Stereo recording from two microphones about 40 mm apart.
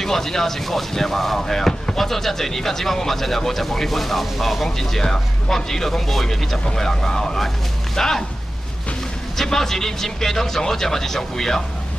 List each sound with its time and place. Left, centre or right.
0.0 s speech: centre
6.6 s speech: centre
9.4 s speech: centre